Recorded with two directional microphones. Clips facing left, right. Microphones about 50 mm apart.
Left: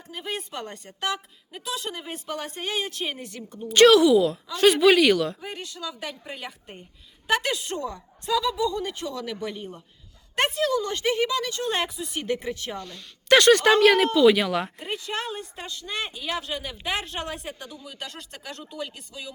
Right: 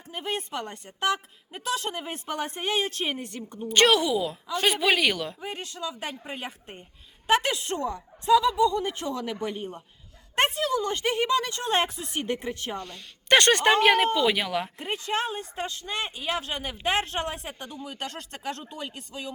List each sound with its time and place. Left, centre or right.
0.1 s speech: right; by 5.4 s centre
5.4 s speech: right
6.2 s a woman's voice: right
12.2 s speech: right
13.7 s speech: right; by 14.7 s centre
15.3 s speech: right
16.4 s speech: right